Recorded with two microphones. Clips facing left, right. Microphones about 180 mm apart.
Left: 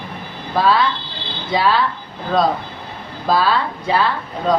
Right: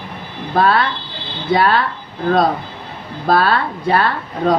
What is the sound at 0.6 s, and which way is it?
A woman's voice, 55° right (ahead or behind).